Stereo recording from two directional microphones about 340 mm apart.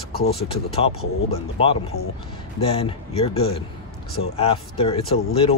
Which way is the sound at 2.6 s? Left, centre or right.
Centre.